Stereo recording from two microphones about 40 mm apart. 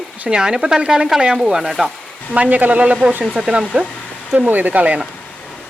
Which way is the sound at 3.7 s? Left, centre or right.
Right.